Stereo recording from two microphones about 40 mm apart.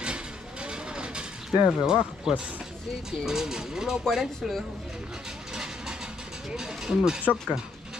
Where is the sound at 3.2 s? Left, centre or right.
Centre.